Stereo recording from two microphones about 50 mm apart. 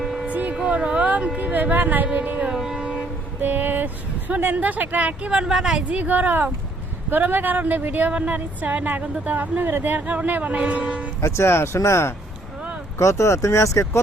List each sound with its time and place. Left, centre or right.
0.0 s a sound: centre
0.3 s a sound: right
1.4 s a sound: right
2.1 s carnatic music: right
2.5 s train: centre
3.4 s a woman's voice: right
5.3 s speech: centre
5.9 s a woman's voice: right
11.2 s speech: left
13.0 s speech: left